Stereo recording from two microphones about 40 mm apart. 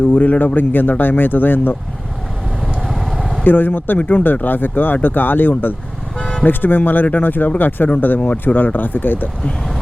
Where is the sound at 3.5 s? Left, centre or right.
Left.